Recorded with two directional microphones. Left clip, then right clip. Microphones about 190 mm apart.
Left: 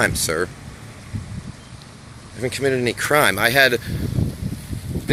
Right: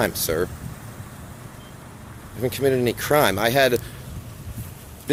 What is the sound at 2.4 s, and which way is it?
Speech, 5° right (ahead or behind).